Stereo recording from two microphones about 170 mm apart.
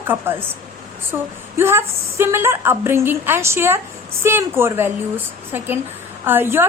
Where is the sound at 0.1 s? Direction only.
15° right (ahead or behind).